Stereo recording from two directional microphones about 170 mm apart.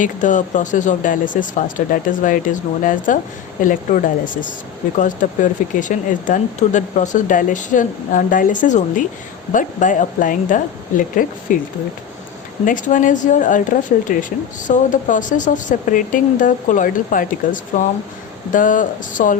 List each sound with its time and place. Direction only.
0.0 s speech: 50° left (ahead or behind)